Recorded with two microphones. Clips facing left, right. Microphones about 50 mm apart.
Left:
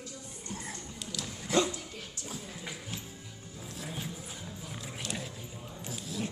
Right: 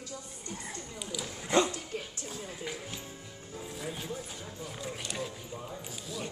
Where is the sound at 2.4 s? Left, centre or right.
Centre.